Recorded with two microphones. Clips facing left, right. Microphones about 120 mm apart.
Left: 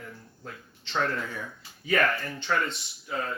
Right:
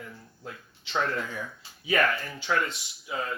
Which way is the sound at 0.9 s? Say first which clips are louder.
Even; 5° right (ahead or behind).